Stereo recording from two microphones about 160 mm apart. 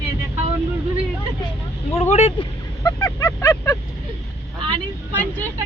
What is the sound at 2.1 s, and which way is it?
Speech, 40° left (ahead or behind).